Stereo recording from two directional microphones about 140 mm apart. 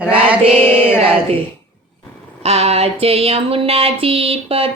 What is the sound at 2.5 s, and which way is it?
Speech, 50° right (ahead or behind).